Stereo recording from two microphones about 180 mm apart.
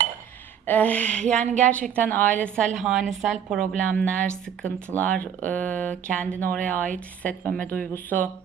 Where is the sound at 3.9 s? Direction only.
5° left (ahead or behind).